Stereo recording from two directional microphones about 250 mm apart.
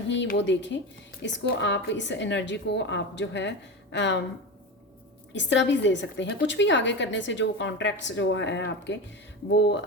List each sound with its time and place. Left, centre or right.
0.1 s a woman's voice: left
5.3 s a woman's voice: left